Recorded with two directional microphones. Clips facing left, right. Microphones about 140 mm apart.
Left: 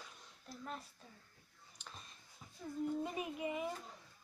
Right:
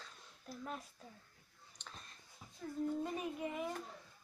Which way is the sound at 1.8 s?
5° left (ahead or behind).